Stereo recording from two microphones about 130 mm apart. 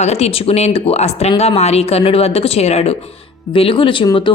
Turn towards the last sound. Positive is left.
turn(degrees=40)  # may be behind; listen again after turning